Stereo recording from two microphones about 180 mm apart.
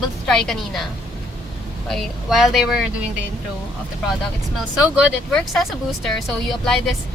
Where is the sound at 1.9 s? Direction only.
Centre (ahead or behind).